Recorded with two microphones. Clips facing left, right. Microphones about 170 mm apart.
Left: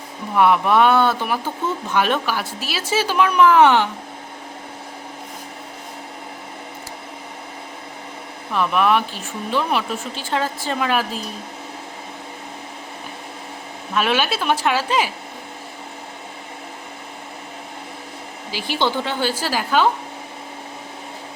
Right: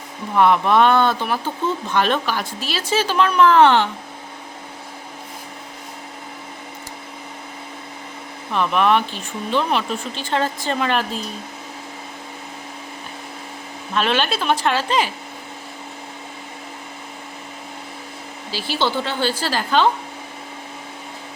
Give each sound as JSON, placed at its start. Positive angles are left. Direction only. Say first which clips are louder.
{"t": 0.3, "sound": "speech", "louder": "even", "side_deg": 10}
{"t": 8.5, "sound": "speech", "louder": "even", "side_deg": 5}
{"t": 13.9, "sound": "speech", "louder": "even", "side_deg": 10}
{"t": 18.5, "sound": "speech", "louder": "even", "side_deg": 15}